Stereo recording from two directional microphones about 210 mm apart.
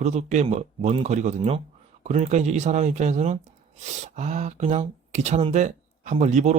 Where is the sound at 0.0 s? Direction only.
35° right (ahead or behind).